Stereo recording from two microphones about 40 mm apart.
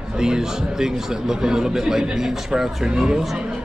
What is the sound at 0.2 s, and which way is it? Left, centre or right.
A man's voice, centre.